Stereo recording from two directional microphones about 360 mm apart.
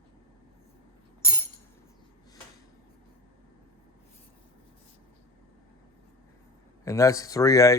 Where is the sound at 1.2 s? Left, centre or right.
Centre.